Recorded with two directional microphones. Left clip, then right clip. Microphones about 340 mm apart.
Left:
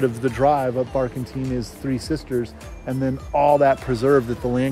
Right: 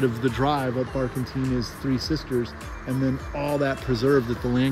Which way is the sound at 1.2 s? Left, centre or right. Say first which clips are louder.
Even; centre.